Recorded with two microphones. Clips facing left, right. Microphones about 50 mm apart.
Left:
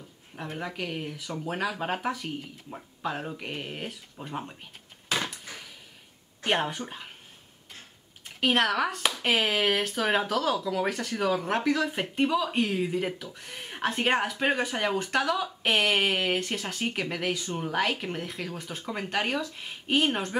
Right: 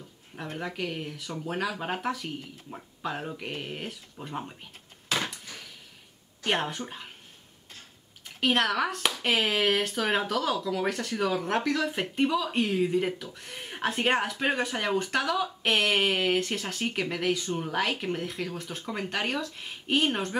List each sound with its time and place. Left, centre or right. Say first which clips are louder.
0.6 s speech: right 1 dB; centre
5.5 s a sound: left 1 dB; left
6.4 s speech: left 1 dB; centre
8.4 s speech: left 1 dB; centre